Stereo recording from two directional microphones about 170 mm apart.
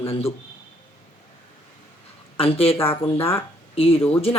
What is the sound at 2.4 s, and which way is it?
Speech, 35° left (ahead or behind).